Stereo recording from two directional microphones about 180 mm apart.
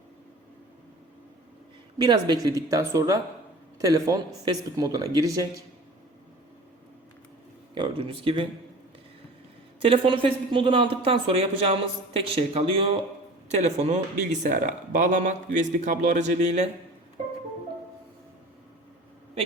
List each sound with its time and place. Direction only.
2.0 s speech: 25° right (ahead or behind)
7.8 s speech: 30° right (ahead or behind)
9.8 s a man's voice: 30° right (ahead or behind)